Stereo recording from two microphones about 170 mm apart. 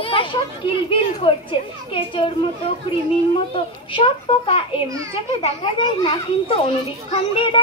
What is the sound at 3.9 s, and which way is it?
A child's voice, 35° left (ahead or behind).